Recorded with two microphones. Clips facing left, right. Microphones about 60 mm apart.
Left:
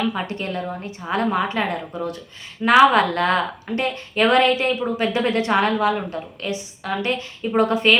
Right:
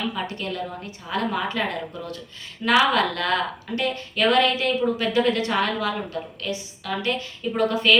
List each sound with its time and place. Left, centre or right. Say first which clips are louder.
0.1 s a woman's voice: left 3 dB; left